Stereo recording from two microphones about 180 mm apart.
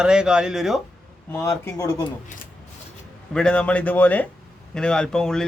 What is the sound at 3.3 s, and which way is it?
Speech, 5° left (ahead or behind).